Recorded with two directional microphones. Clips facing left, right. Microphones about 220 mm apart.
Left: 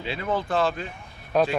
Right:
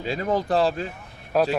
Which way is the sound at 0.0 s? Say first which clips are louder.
Right 3 dB; 40° right (ahead or behind).